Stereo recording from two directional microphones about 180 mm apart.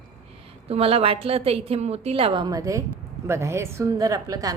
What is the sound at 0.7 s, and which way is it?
A woman's voice, 35° right (ahead or behind).